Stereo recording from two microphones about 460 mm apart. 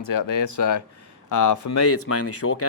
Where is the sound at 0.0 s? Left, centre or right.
Left.